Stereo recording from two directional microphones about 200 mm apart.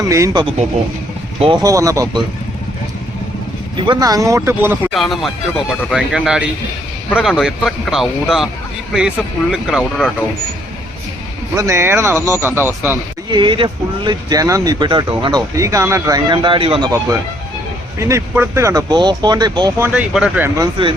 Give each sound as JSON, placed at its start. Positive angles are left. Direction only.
{"t": 0.0, "sound": "speech", "side_deg": -15}
{"t": 3.8, "sound": "speech", "side_deg": -20}
{"t": 4.9, "sound": "speech", "side_deg": 0}
{"t": 11.5, "sound": "speech", "side_deg": -15}
{"t": 13.3, "sound": "speech", "side_deg": -25}
{"t": 18.0, "sound": "speech", "side_deg": -15}
{"t": 19.8, "sound": "speech", "side_deg": -5}
{"t": 20.6, "sound": "speech", "side_deg": -25}